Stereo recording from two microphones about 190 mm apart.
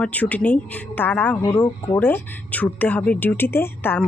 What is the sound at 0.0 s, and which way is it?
Speech, 10° left (ahead or behind).